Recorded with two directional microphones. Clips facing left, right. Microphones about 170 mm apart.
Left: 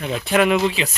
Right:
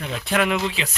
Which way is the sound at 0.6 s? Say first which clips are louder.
Left 6 dB; 10° left (ahead or behind).